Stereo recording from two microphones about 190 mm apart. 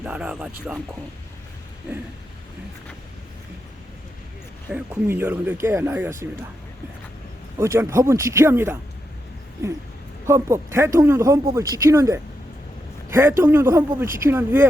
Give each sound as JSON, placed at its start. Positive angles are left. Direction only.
{"t": 0.0, "sound": "speech", "side_deg": -5}
{"t": 4.7, "sound": "speech", "side_deg": -10}
{"t": 7.6, "sound": "speech", "side_deg": -15}
{"t": 10.2, "sound": "speech", "side_deg": -15}